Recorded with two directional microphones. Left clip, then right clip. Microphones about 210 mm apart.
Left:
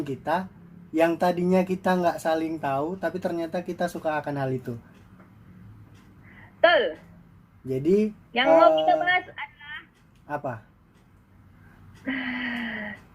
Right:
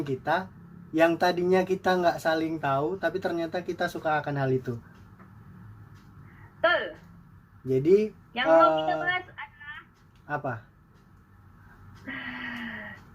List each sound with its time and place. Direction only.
0.0 s speech: 15° left (ahead or behind)
6.6 s speech: 40° left (ahead or behind)
7.7 s speech: 10° left (ahead or behind)
8.9 s doorbell: 40° left (ahead or behind)
10.2 s speech: 10° left (ahead or behind)
12.0 s music: 40° left (ahead or behind)